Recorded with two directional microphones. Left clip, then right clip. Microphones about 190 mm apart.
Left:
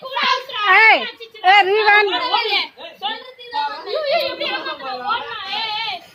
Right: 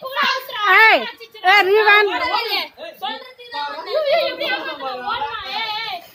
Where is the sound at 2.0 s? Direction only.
50° right (ahead or behind).